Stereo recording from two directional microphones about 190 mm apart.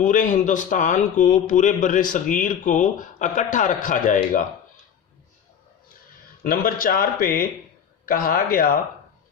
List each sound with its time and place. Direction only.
0.0 s speech: 45° left (ahead or behind)
6.4 s speech: 50° left (ahead or behind)